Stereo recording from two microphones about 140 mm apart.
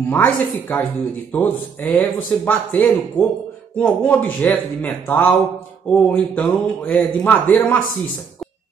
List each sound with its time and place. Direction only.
0.1 s a man's voice: 10° left (ahead or behind)